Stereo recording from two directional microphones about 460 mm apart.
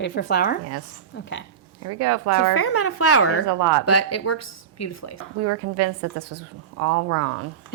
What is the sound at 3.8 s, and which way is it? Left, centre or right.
Speech, left.